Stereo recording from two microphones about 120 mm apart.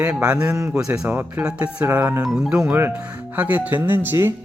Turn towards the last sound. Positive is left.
turn(degrees=-20)  # may be behind; listen again after turning